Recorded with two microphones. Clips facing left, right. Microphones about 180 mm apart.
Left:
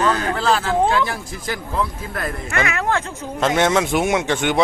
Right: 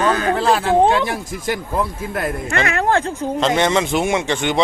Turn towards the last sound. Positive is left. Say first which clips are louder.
# even
turn(degrees=0)  # may be behind; listen again after turning